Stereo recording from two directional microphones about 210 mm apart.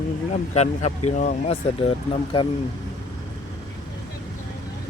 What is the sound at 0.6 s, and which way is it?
Speech, 30° left (ahead or behind).